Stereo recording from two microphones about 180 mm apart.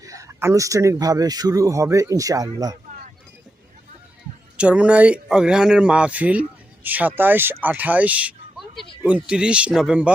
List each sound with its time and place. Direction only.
0.0 s speech: 20° right (ahead or behind)
4.5 s speech: 5° right (ahead or behind)